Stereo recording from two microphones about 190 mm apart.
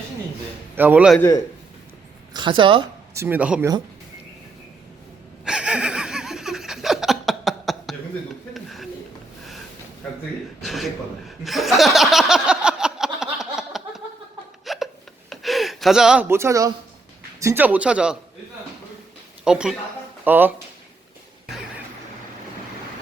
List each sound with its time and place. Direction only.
0.8 s speech: 10° right (ahead or behind)
2.3 s a woman's voice: 25° right (ahead or behind)
3.2 s speech: 10° right (ahead or behind)
5.5 s laughter: 5° right (ahead or behind)
8.5 s a sound: centre (ahead or behind)
10.6 s chuckle: centre (ahead or behind)
14.6 s hiccup: centre (ahead or behind)
15.3 s a sound: centre (ahead or behind); by 16.7 s 15° right (ahead or behind)
17.4 s speech: 10° right (ahead or behind)
19.5 s speech: 5° right (ahead or behind)